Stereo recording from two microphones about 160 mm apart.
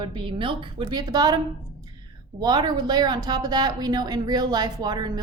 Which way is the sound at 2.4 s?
25° right (ahead or behind).